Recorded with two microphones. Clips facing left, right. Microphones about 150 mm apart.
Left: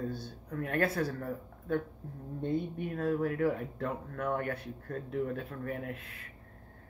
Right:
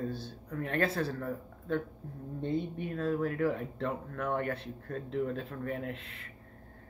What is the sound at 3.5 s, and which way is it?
Speech, 30° right (ahead or behind).